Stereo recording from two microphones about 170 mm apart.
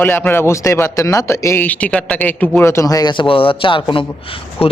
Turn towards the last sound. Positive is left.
turn(degrees=35)  # may be behind; listen again after turning